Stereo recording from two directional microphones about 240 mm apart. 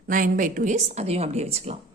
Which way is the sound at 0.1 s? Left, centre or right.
Right.